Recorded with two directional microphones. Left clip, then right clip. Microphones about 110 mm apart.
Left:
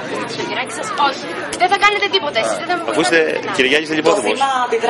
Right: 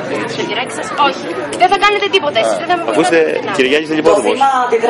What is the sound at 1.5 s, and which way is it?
A man's voice, 15° left (ahead or behind).